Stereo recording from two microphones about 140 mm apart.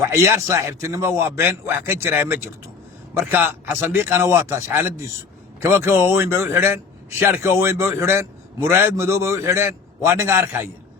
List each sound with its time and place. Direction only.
0.0 s a man's voice: 20° right (ahead or behind)